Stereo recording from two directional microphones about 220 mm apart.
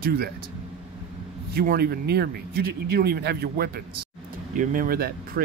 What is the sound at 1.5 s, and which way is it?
Speech, 45° right (ahead or behind).